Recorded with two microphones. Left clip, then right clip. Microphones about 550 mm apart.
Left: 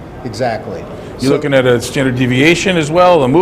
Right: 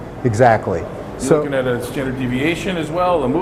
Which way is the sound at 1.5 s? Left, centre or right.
Left.